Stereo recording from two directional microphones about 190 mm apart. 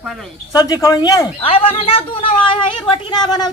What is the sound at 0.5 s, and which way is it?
Speech, 20° left (ahead or behind).